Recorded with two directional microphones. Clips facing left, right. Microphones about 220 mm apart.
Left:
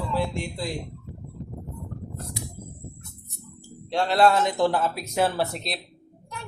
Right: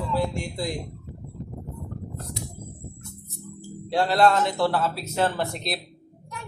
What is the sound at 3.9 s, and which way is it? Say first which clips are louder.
Speech: even; 5° right (ahead or behind).